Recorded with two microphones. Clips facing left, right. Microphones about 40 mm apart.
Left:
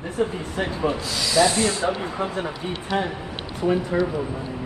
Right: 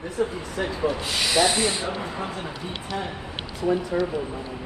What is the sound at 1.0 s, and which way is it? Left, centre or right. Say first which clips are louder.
Speech: left 2 dB; right.